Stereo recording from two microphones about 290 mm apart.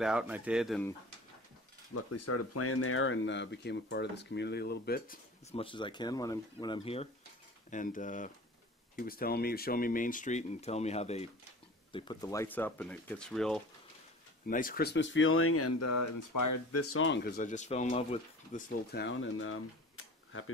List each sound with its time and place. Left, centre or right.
0.0 s speech: centre
2.0 s speech: left; by 13.6 s centre
14.5 s speech: left
16.8 s speech: left
18.9 s speech: left